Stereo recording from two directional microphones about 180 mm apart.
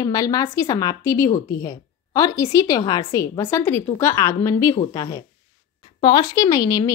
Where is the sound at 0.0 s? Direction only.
20° left (ahead or behind).